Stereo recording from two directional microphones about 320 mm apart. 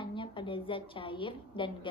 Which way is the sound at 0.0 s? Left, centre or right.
Centre.